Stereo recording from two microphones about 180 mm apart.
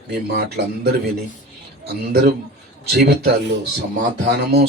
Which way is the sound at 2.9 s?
60° right (ahead or behind).